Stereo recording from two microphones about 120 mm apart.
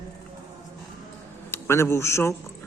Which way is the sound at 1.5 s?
20° left (ahead or behind).